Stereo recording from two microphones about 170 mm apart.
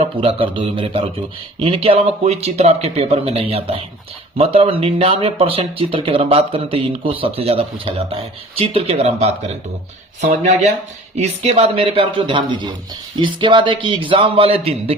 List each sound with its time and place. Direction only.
0.0 s speech: 30° right (ahead or behind)